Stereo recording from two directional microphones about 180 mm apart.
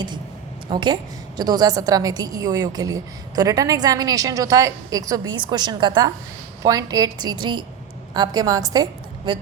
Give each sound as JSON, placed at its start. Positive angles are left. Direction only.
{"t": 0.7, "sound": "a woman's voice", "side_deg": -25}